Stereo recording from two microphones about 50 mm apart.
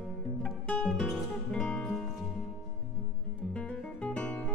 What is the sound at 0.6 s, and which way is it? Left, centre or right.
Music, left.